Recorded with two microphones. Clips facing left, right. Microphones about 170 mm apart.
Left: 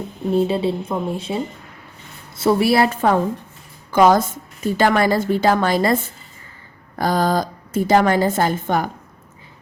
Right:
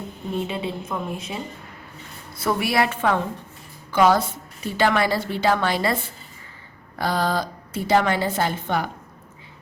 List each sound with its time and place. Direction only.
0.3 s a woman's voice: 35° left (ahead or behind)
2.4 s a woman's voice: 30° left (ahead or behind)